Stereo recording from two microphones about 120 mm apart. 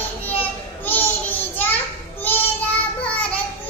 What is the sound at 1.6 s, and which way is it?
Child singing, 15° left (ahead or behind).